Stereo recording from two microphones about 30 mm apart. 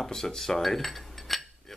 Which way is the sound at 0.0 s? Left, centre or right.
Centre.